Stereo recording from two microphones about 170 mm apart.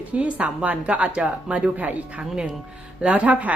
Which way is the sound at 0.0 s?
10° right (ahead or behind).